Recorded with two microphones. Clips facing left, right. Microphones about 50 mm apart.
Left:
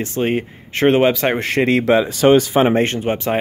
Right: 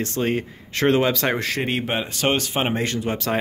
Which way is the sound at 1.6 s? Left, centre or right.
Left.